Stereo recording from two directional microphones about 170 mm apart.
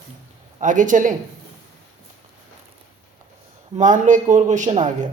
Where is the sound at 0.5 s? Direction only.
50° right (ahead or behind).